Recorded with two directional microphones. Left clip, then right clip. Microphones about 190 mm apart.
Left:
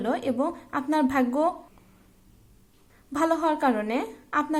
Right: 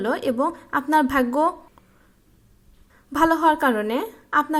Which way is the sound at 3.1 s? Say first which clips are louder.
Right 6 dB; 20° right (ahead or behind).